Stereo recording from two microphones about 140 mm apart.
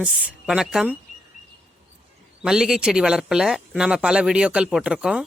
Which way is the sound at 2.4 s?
5° right (ahead or behind).